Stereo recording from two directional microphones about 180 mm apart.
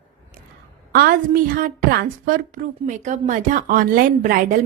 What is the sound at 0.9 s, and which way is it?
A woman's voice, 55° right (ahead or behind).